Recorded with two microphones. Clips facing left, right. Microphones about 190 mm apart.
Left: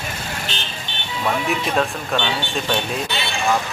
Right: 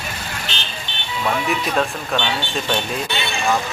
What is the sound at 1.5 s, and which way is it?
Speech, centre (ahead or behind).